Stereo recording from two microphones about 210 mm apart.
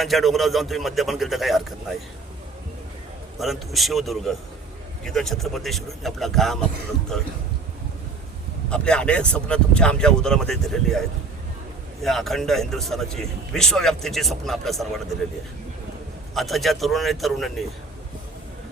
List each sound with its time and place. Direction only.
0.0 s speech: centre (ahead or behind)
3.3 s speech: centre (ahead or behind)
8.7 s speech: 5° left (ahead or behind)
12.0 s speech: centre (ahead or behind)
16.3 s speech: centre (ahead or behind)